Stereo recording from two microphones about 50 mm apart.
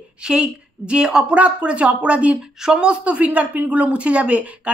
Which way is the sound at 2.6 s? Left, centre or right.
Centre.